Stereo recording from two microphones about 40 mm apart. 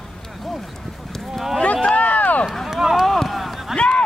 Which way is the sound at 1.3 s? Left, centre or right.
Centre.